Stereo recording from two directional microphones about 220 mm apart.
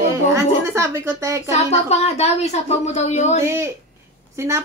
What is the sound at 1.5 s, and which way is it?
A woman's voice, 30° left (ahead or behind).